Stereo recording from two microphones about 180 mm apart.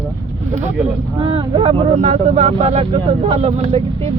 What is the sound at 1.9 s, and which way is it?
Speech, 40° right (ahead or behind).